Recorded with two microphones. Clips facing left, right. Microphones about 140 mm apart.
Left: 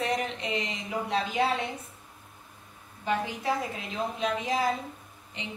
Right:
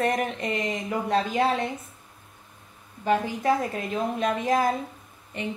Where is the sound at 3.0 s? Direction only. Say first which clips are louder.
Right 6 dB; 50° right (ahead or behind).